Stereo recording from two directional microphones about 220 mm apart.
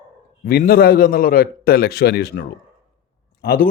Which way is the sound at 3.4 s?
45° left (ahead or behind).